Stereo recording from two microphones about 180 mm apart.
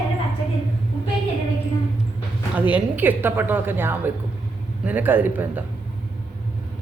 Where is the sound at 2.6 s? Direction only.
10° right (ahead or behind).